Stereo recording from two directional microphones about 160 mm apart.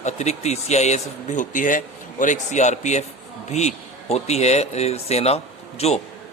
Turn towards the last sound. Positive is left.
turn(degrees=40)  # may be behind; listen again after turning